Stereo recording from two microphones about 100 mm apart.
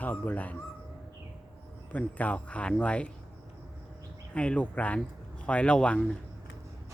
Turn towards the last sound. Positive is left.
turn(degrees=10)  # may be behind; listen again after turning